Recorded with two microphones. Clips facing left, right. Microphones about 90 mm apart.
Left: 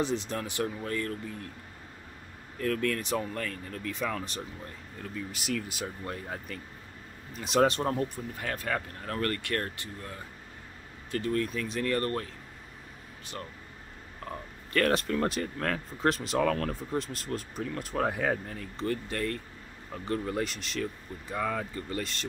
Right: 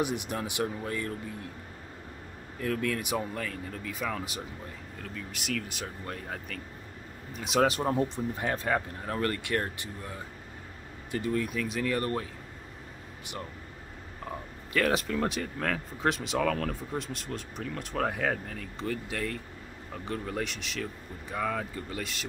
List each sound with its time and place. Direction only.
0.0 s speech: 15° right (ahead or behind)
2.6 s speech: 10° right (ahead or behind)
7.9 s speech: 20° right (ahead or behind)
14.3 s a sound: 5° right (ahead or behind)
14.7 s speech: 5° right (ahead or behind)